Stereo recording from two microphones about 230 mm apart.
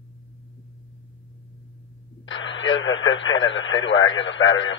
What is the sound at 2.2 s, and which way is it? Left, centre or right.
Speech, left.